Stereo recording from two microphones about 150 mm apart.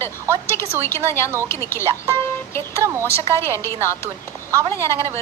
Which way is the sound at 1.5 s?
20° left (ahead or behind).